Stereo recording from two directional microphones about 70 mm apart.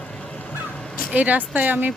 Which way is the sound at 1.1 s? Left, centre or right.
Right.